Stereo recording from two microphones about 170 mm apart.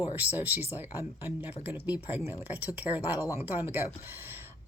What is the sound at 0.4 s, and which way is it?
A woman's voice, 10° right (ahead or behind).